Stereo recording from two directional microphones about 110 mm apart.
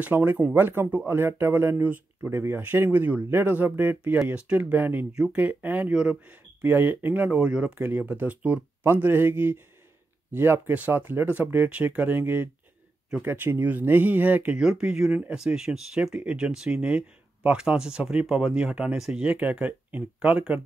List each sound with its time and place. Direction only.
0.0 s speech: 15° right (ahead or behind)